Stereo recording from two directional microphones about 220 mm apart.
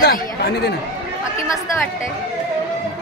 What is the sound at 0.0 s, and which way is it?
Chatter, 45° left (ahead or behind).